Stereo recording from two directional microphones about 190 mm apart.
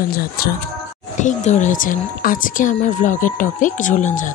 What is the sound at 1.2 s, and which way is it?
Speech, 40° left (ahead or behind).